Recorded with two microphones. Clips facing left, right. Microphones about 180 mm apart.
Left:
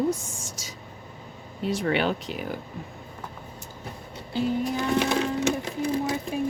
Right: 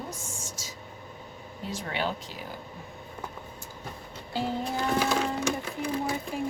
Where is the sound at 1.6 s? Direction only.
65° left (ahead or behind).